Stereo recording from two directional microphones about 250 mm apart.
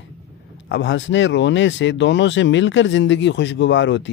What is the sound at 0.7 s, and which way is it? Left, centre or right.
Speech, left.